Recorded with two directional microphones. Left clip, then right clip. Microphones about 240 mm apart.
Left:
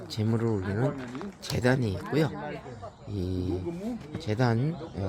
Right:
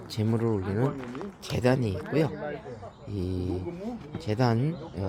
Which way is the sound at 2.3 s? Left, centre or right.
Left.